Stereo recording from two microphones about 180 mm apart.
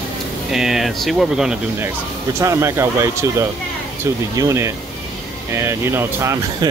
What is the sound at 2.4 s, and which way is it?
Speech, 15° right (ahead or behind).